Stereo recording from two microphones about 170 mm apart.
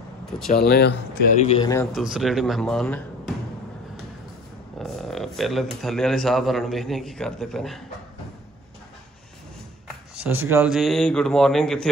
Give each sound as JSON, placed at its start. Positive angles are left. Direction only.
{"t": 0.5, "sound": "speech", "side_deg": 65}
{"t": 1.6, "sound": "a man's voice", "side_deg": 20}
{"t": 1.9, "sound": "mantra", "side_deg": 0}
{"t": 4.7, "sound": "speech", "side_deg": 0}
{"t": 10.2, "sound": "speech", "side_deg": -15}
{"t": 10.7, "sound": "mantra", "side_deg": 0}